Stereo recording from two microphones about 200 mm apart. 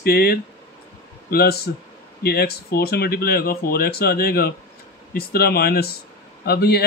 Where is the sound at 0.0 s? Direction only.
50° left (ahead or behind).